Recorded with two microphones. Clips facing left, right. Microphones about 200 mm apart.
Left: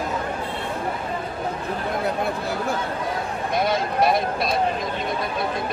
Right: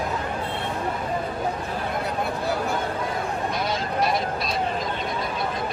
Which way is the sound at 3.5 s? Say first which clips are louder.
Left 4 dB; 55° left (ahead or behind).